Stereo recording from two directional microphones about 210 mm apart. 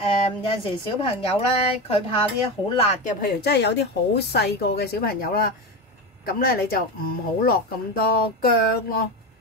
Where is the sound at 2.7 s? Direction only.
30° left (ahead or behind); by 9.0 s 45° left (ahead or behind).